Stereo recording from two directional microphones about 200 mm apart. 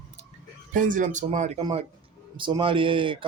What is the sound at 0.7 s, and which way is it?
Speech, 40° right (ahead or behind).